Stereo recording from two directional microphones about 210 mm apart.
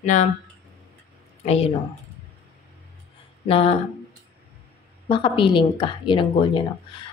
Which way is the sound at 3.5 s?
30° left (ahead or behind).